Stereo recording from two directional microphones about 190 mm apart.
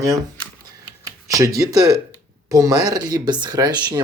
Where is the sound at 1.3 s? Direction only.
15° right (ahead or behind).